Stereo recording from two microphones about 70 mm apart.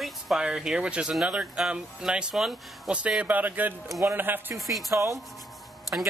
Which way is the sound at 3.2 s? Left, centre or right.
Right.